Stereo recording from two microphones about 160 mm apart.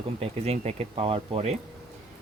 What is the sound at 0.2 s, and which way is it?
Speech, 40° right (ahead or behind).